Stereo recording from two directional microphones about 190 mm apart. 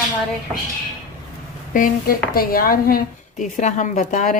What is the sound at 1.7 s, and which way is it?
A woman's voice, 45° left (ahead or behind).